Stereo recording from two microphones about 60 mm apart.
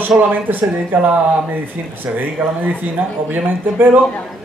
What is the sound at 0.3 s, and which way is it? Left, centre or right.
A man's voice, right.